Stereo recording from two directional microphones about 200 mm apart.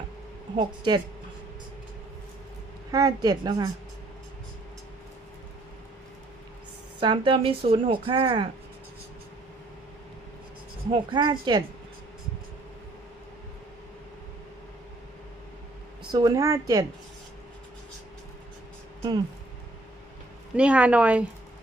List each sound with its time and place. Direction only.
0.5 s speech: 20° right (ahead or behind)
2.9 s speech: 20° right (ahead or behind)
7.0 s speech: 25° right (ahead or behind)
10.9 s speech: 20° right (ahead or behind)
16.1 s speech: 20° right (ahead or behind)
20.6 s speech: 5° right (ahead or behind)